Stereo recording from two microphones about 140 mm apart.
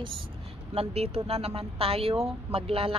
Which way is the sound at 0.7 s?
45° right (ahead or behind).